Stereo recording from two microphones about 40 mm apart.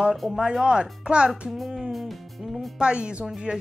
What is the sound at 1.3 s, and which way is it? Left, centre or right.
Speech, centre.